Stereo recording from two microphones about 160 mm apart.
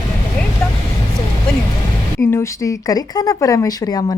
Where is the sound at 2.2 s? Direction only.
15° left (ahead or behind).